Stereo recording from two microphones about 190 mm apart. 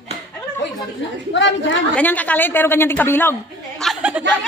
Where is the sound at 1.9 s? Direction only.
10° left (ahead or behind).